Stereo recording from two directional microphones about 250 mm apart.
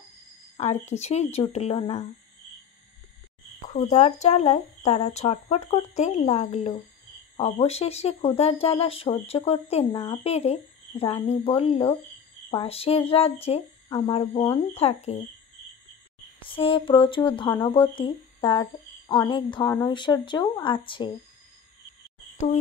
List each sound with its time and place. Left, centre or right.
0.6 s speech: left
3.6 s speech: left
16.4 s speech: left